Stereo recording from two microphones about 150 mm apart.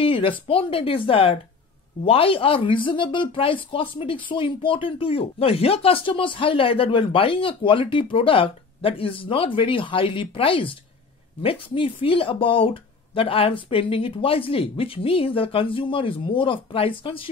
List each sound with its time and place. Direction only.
0.0 s speech: 35° left (ahead or behind)